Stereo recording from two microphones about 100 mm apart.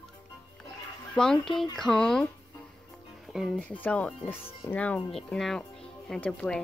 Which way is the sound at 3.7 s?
15° left (ahead or behind).